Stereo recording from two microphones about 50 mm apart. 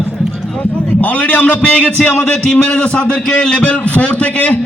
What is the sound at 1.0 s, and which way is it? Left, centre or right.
Speech, left.